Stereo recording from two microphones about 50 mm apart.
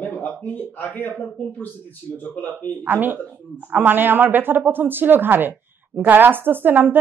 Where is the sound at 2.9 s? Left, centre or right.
Right.